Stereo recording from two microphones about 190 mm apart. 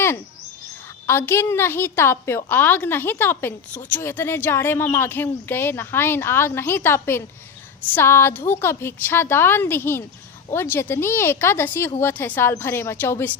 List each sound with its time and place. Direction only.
1.0 s a woman's voice: 10° left (ahead or behind)